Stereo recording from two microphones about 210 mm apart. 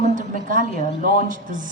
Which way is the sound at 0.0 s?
40° right (ahead or behind).